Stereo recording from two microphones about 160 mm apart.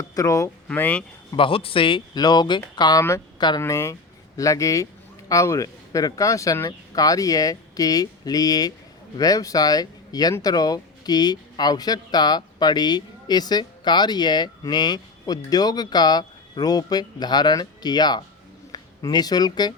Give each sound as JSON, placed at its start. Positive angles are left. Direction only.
{"t": 0.1, "sound": "speech", "side_deg": 20}
{"t": 0.7, "sound": "speech", "side_deg": 10}
{"t": 1.3, "sound": "speech", "side_deg": 35}